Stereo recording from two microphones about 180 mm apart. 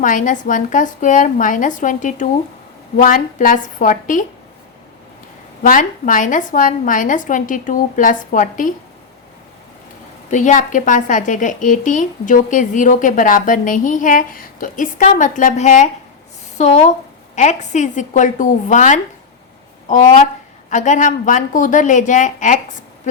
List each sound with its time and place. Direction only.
0.0 s a woman's voice: 45° left (ahead or behind)
5.6 s a woman's voice: 50° left (ahead or behind)
10.2 s a woman's voice: 45° left (ahead or behind)